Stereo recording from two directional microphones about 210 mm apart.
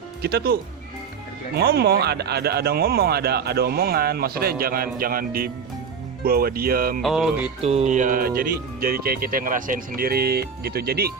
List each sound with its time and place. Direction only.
0.2 s speech: 50° right (ahead or behind)
7.0 s music: centre (ahead or behind)
7.6 s music: 30° right (ahead or behind)
8.4 s speech: 45° right (ahead or behind)